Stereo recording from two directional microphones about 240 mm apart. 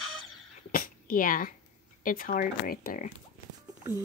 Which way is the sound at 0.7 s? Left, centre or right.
Left.